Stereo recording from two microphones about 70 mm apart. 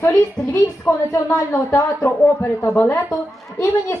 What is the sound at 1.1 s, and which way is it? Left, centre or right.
Speech, left.